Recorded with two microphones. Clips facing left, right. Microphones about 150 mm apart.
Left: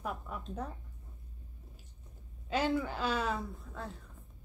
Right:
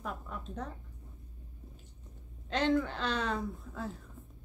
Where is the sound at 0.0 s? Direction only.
5° left (ahead or behind).